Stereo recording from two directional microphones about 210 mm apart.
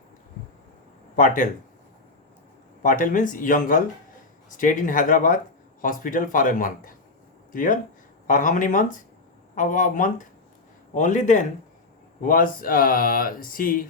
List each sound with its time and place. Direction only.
1.1 s speech: 40° left (ahead or behind)
2.8 s speech: 40° left (ahead or behind)